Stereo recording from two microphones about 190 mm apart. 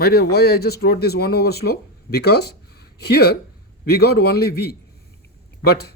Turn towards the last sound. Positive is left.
turn(degrees=55)  # may be behind; listen again after turning